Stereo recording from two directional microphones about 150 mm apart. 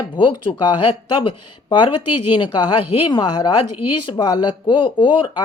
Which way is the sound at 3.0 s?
30° left (ahead or behind).